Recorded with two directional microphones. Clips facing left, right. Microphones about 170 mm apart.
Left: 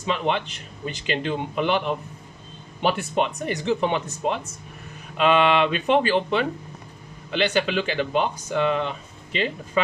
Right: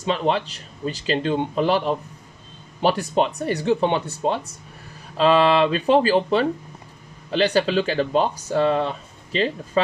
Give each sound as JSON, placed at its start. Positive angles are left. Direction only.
{"t": 0.0, "sound": "speech", "side_deg": -35}